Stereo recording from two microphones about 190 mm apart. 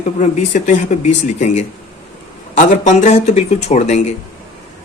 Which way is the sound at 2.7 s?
40° left (ahead or behind).